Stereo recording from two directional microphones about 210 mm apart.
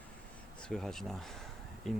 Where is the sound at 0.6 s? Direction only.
5° left (ahead or behind).